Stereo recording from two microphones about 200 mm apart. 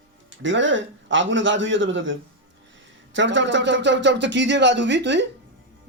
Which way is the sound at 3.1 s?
65° right (ahead or behind).